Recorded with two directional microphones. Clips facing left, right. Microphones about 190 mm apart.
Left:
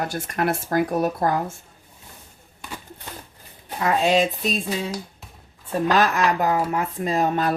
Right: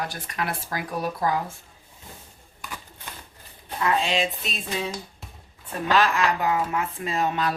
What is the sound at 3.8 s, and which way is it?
Speech, 45° left (ahead or behind).